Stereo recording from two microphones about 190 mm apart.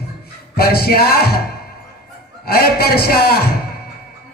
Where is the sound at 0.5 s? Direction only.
55° left (ahead or behind).